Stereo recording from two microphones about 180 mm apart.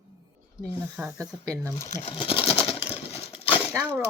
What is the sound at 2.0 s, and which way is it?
Sewing machine, 35° left (ahead or behind).